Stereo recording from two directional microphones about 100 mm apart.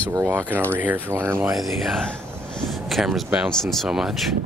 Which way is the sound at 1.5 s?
Centre (ahead or behind).